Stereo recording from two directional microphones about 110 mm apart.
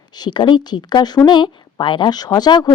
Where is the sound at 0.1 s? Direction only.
40° left (ahead or behind).